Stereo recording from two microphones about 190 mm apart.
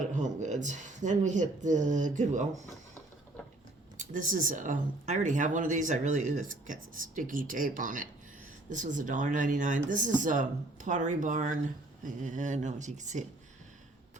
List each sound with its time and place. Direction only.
0.1 s speech: 40° right (ahead or behind)
3.9 s speech: 40° right (ahead or behind)